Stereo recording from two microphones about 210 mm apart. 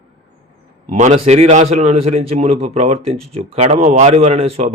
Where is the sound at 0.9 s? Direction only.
30° right (ahead or behind).